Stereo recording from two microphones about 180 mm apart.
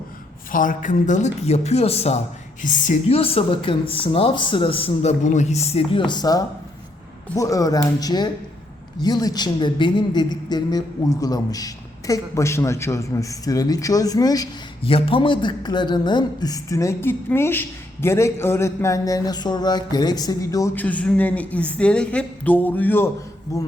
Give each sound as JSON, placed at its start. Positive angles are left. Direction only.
{"t": 0.5, "sound": "speech", "side_deg": 50}
{"t": 5.2, "sound": "a man's voice", "side_deg": 40}
{"t": 14.8, "sound": "a man's voice", "side_deg": 30}